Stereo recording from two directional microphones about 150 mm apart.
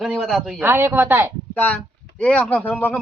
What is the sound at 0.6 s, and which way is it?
Speech, 15° right (ahead or behind).